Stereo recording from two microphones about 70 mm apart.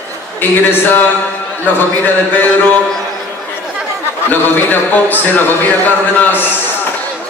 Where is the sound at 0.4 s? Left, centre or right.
Left.